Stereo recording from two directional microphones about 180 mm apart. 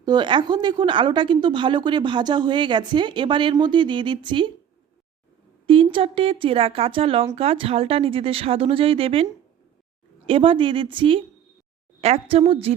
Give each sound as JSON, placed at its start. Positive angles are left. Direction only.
{"t": 0.0, "sound": "a woman's voice", "side_deg": -25}
{"t": 5.6, "sound": "speech", "side_deg": -30}
{"t": 10.2, "sound": "a woman's voice", "side_deg": -30}